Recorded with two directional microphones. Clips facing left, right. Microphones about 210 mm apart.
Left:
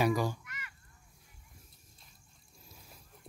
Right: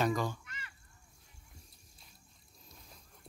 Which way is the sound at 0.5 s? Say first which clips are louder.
Left 1 dB; 30° right (ahead or behind).